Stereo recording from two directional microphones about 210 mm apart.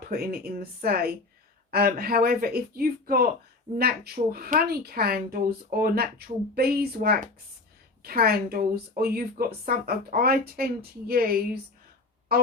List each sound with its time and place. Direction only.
0.1 s speech: 45° right (ahead or behind)